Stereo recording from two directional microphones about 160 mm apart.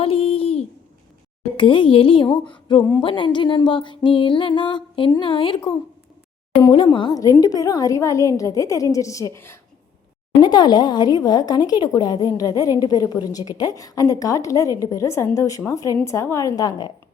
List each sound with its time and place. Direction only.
0.0 s a sound: 35° left (ahead or behind)
1.5 s music: 30° left (ahead or behind)
6.6 s a woman's voice: 30° left (ahead or behind)
10.4 s a woman's voice: 25° left (ahead or behind)